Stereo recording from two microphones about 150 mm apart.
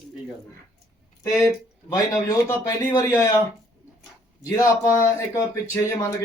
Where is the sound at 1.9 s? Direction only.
20° left (ahead or behind).